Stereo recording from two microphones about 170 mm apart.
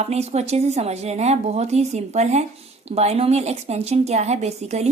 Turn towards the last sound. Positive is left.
turn(degrees=-40)  # may be behind; listen again after turning